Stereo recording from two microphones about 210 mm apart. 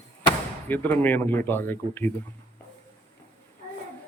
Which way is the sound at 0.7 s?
10° left (ahead or behind).